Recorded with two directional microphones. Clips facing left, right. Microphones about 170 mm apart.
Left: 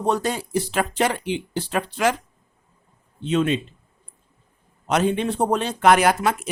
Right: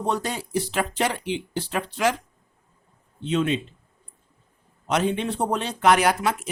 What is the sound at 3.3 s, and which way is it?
Speech, 50° left (ahead or behind).